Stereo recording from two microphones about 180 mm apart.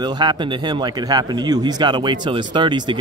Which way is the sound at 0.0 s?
25° right (ahead or behind).